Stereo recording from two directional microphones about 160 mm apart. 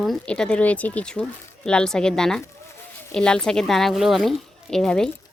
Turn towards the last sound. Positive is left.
turn(degrees=5)  # may be behind; listen again after turning